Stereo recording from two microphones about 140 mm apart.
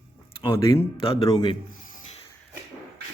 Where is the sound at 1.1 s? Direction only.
45° left (ahead or behind).